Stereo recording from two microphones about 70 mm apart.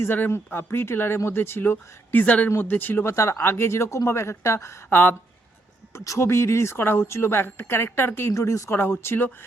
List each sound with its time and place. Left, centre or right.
0.1 s speech: left
8.3 s speech: left
8.7 s speech: left